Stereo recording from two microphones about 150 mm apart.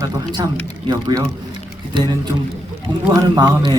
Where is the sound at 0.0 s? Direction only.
30° right (ahead or behind).